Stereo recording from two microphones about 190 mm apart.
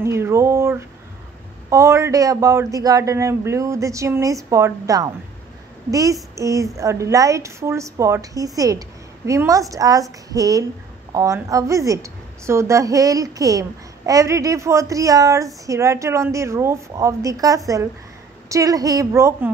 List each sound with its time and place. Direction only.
0.0 s a woman's voice: 15° right (ahead or behind)